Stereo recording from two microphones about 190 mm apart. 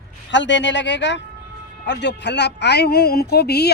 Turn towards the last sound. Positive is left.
turn(degrees=60)  # may be behind; listen again after turning